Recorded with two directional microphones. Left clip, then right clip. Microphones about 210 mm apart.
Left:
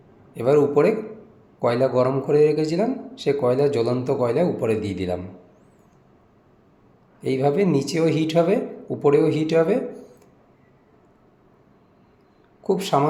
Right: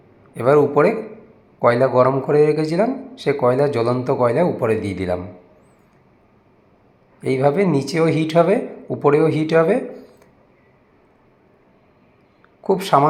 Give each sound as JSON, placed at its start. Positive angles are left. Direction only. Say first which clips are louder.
{"t": 0.3, "sound": "a man's voice", "louder": "right 3 dB", "side_deg": -5}
{"t": 7.2, "sound": "a man's voice", "louder": "right 3 dB", "side_deg": -5}
{"t": 12.6, "sound": "a man's voice", "louder": "right 5 dB", "side_deg": -5}